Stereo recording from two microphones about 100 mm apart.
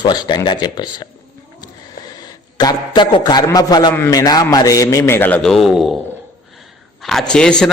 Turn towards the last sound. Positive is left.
turn(degrees=5)  # may be behind; listen again after turning